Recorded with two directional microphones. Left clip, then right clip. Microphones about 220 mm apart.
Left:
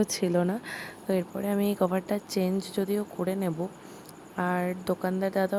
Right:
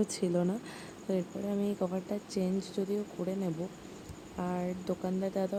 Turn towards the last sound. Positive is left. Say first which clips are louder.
# left 6 dB
turn(degrees=20)  # may be behind; listen again after turning